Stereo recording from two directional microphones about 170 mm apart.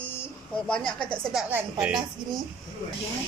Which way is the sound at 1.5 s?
10° right (ahead or behind).